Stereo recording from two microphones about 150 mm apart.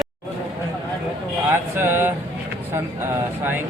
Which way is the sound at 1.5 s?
15° right (ahead or behind).